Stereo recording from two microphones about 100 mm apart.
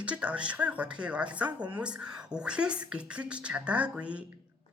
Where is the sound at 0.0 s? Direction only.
10° right (ahead or behind).